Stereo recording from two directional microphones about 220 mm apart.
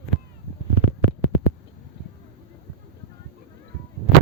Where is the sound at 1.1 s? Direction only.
50° right (ahead or behind).